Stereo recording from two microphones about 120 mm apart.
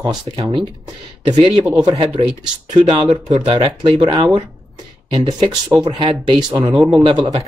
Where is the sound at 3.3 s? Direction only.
35° right (ahead or behind).